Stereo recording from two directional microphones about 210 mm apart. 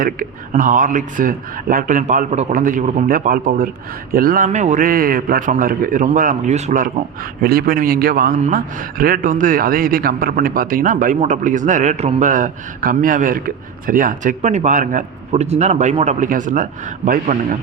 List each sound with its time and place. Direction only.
0.0 s a man's voice: 40° right (ahead or behind)